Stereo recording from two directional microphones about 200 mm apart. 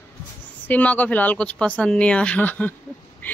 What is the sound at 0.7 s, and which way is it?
Speech, 5° left (ahead or behind).